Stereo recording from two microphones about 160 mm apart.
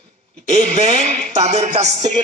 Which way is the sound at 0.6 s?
40° right (ahead or behind).